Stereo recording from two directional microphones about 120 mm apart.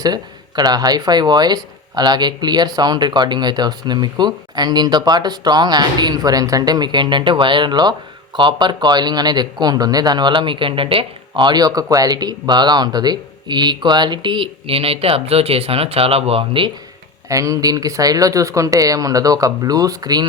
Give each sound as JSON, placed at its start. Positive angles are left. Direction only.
{"t": 0.0, "sound": "speech", "side_deg": -35}
{"t": 17.2, "sound": "speech", "side_deg": -30}